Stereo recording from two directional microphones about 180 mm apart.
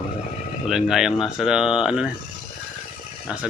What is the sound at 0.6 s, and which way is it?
Speech, centre (ahead or behind).